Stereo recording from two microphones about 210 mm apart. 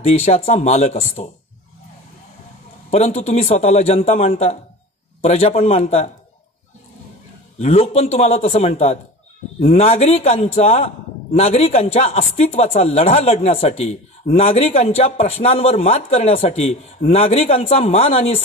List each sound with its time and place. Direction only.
0.0 s a man's voice: 30° left (ahead or behind)
2.9 s a man's voice: 30° left (ahead or behind)
7.5 s speech: 30° left (ahead or behind)